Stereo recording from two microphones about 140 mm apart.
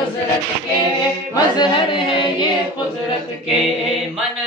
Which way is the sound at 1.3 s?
35° left (ahead or behind).